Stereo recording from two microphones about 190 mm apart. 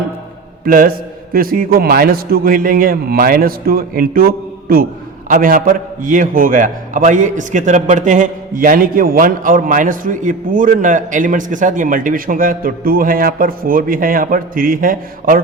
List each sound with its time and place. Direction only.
0.6 s a man's voice: 45° right (ahead or behind)